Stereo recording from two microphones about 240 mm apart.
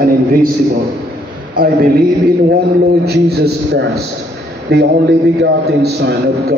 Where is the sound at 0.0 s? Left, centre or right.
Right.